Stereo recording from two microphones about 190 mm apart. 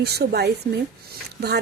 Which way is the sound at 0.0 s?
55° right (ahead or behind).